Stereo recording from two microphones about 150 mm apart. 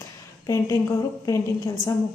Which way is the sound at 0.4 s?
20° left (ahead or behind).